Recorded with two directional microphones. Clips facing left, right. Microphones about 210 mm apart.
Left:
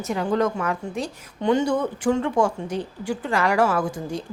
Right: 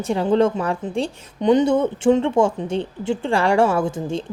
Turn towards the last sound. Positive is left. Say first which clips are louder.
# right 4 dB
turn(degrees=-25)  # may be behind; listen again after turning